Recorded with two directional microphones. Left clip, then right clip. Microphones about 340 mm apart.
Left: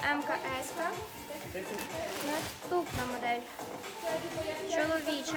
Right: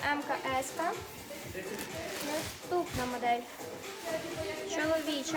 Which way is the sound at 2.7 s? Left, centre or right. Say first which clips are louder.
Even; centre.